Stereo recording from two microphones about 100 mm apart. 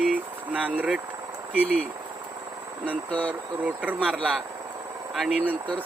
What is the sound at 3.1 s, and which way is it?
Speech, 15° left (ahead or behind).